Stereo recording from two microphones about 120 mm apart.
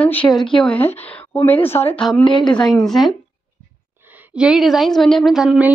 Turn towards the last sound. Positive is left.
turn(degrees=-5)  # may be behind; listen again after turning